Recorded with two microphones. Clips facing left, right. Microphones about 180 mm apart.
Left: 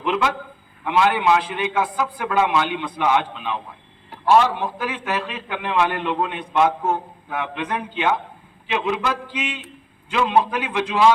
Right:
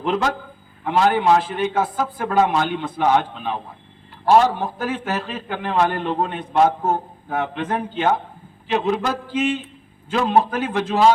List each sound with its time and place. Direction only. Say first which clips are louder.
0.0 s a man's voice: right 1 dB; 40° right (ahead or behind)